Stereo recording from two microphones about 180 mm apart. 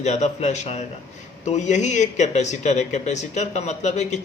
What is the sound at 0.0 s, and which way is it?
Speech, 40° left (ahead or behind).